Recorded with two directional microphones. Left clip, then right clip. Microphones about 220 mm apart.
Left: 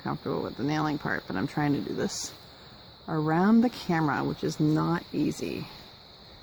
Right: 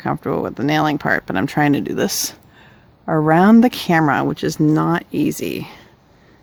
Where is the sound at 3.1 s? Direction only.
50° right (ahead or behind).